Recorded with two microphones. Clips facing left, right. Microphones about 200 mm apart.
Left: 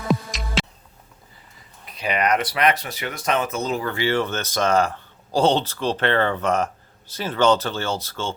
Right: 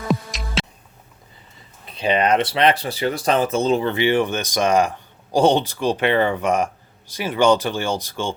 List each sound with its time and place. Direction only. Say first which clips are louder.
0.1 s music: even; centre (ahead or behind)
1.8 s speech: right 4 dB; 30° right (ahead or behind)